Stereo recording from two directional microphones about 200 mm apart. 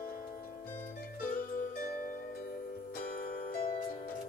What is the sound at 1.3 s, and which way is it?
Music, 50° left (ahead or behind).